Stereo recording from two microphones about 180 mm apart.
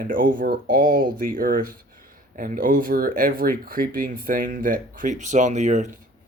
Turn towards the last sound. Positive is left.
turn(degrees=-40)  # may be behind; listen again after turning